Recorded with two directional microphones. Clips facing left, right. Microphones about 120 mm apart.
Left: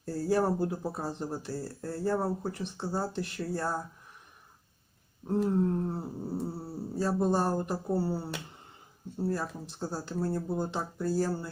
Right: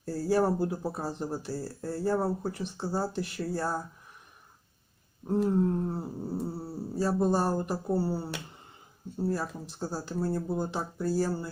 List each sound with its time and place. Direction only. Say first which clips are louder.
0.0 s speech: right 1 dB; 5° right (ahead or behind)
5.3 s speech: right 1 dB; 5° right (ahead or behind)